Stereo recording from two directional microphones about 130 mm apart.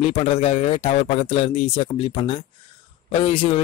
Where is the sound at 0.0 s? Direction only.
50° left (ahead or behind).